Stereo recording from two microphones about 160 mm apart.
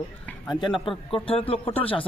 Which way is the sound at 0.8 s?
35° left (ahead or behind).